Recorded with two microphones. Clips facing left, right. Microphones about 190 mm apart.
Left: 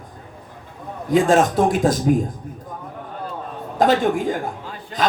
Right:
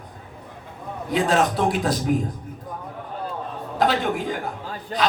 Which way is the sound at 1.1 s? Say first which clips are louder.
Left 5 dB; 45° left (ahead or behind).